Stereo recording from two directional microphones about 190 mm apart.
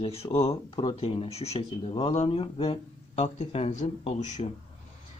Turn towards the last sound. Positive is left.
turn(degrees=40)  # may be behind; listen again after turning